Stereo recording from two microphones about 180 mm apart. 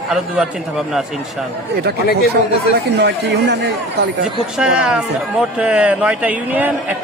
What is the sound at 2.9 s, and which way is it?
Speech, 65° right (ahead or behind).